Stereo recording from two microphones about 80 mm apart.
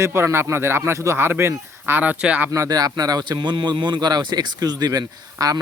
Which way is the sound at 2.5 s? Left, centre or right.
Right.